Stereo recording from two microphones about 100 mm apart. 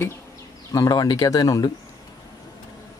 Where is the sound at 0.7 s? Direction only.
40° left (ahead or behind).